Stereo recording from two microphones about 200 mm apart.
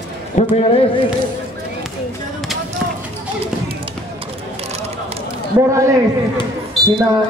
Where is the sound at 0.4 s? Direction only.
30° left (ahead or behind).